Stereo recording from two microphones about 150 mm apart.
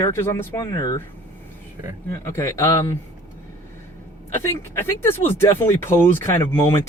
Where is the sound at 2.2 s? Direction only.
20° left (ahead or behind).